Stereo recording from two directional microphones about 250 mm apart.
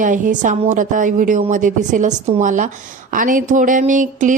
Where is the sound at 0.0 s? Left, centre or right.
Right.